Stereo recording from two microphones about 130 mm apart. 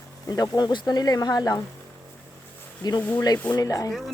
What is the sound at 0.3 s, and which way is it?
Speech, 30° left (ahead or behind).